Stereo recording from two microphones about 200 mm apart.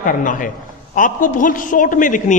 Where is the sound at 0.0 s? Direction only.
40° left (ahead or behind).